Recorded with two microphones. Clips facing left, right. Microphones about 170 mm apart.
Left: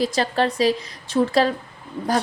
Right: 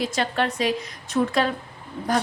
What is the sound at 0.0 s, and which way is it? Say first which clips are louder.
Speech: left 4 dB; 35° left (ahead or behind).